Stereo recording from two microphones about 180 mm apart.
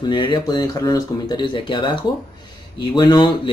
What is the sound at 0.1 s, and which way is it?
Speech, 25° left (ahead or behind).